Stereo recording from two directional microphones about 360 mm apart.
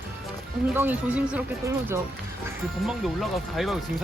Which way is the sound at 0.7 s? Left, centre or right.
Centre.